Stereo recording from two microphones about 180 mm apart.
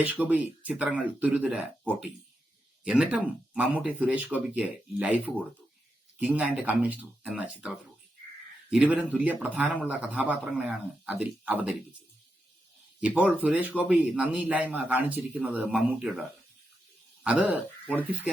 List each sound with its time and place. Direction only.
0.0 s a man's voice: 10° right (ahead or behind)
8.7 s a man's voice: 10° right (ahead or behind)
13.0 s a man's voice: 10° right (ahead or behind)
17.2 s a man's voice: 10° right (ahead or behind)